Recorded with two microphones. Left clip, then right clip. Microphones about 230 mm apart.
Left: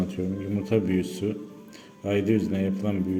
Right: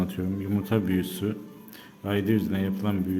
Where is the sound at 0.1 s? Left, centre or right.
Centre.